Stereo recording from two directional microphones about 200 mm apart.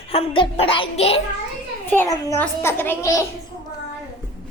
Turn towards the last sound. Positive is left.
turn(degrees=15)  # may be behind; listen again after turning